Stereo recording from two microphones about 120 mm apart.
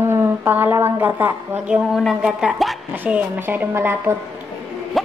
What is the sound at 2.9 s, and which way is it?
A woman's voice, 15° right (ahead or behind).